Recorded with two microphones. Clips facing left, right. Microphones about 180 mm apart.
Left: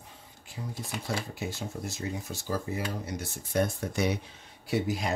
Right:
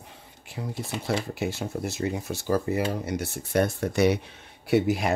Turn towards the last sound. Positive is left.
turn(degrees=-65)  # may be behind; listen again after turning